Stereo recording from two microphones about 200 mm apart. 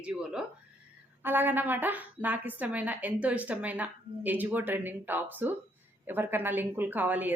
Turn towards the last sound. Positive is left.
turn(degrees=-10)  # may be behind; listen again after turning